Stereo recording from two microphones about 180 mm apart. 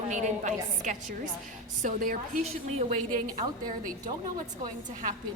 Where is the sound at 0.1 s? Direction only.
45° right (ahead or behind).